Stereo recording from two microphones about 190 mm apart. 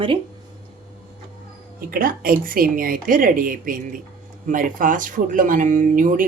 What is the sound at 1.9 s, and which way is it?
A woman's voice, 50° right (ahead or behind).